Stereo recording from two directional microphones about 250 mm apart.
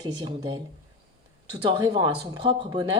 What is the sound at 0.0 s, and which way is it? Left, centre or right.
Speech, centre.